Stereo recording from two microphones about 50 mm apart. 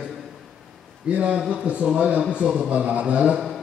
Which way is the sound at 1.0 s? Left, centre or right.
Right.